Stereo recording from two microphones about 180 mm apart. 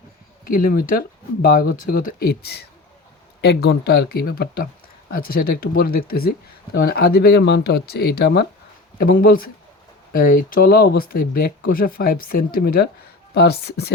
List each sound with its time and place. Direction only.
0.4 s speech: 50° left (ahead or behind)
9.0 s speech: 55° left (ahead or behind)